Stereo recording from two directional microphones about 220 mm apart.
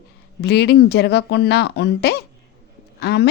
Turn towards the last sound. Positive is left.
turn(degrees=50)  # may be behind; listen again after turning